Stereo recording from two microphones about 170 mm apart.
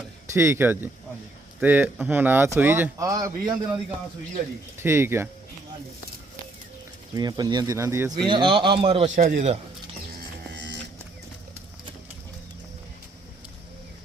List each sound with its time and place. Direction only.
0.3 s speech: 15° right (ahead or behind)
4.8 s speech: 15° right (ahead or behind)
7.2 s speech: 25° right (ahead or behind)
8.3 s a man's voice: 30° right (ahead or behind); by 9.6 s 45° right (ahead or behind)
10.5 s music: 90° right